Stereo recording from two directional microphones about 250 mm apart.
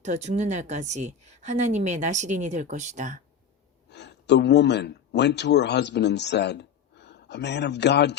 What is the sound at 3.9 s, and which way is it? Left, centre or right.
Speech, left.